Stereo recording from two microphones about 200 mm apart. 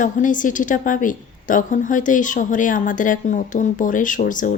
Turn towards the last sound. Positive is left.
turn(degrees=40)  # may be behind; listen again after turning